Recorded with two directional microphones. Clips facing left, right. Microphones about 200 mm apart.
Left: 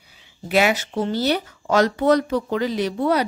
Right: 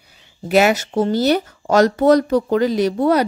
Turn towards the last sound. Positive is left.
turn(degrees=-45)  # may be behind; listen again after turning